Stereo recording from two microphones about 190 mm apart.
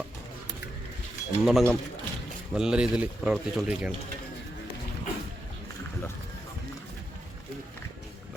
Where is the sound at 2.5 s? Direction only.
5° right (ahead or behind).